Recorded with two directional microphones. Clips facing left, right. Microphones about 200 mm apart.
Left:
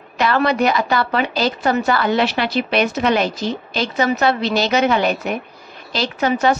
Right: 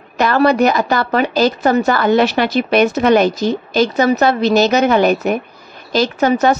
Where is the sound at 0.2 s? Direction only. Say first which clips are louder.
Right 4 dB; 45° right (ahead or behind).